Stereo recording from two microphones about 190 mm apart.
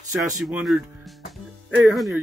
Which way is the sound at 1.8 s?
Centre (ahead or behind).